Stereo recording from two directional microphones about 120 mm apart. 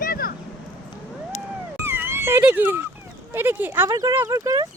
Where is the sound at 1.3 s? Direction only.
75° left (ahead or behind).